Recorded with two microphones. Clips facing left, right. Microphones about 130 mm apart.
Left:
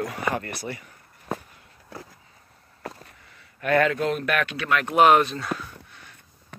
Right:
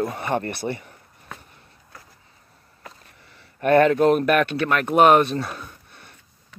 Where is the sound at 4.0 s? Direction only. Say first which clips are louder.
Right 7 dB; 50° right (ahead or behind).